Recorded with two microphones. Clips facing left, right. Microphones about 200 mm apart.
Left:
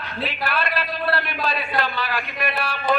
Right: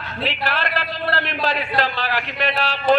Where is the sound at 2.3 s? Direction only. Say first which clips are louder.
Right 3 dB; 90° right.